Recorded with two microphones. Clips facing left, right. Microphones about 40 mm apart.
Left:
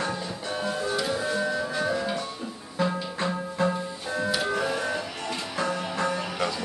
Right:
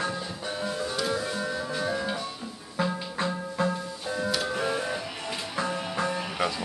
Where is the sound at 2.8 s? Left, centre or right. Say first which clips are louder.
Left 2 dB; centre.